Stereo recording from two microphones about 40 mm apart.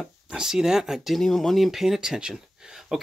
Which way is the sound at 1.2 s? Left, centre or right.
Centre.